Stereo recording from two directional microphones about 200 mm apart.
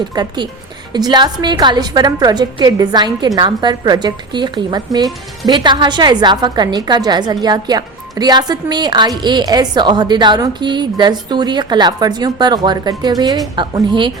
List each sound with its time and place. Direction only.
0.1 s a woman's voice: 20° right (ahead or behind)